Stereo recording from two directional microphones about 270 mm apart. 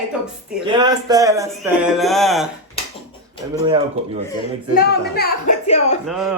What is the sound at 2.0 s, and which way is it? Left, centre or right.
Speech, centre.